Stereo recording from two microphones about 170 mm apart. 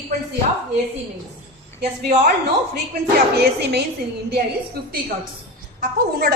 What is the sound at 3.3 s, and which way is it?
Speech, 70° right (ahead or behind).